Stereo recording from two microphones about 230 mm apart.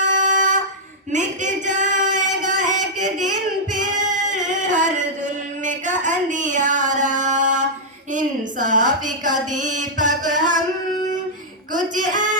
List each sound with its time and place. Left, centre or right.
0.0 s a sound: right
3.7 s singing: right
8.1 s a woman's voice: right
11.7 s a woman's voice: right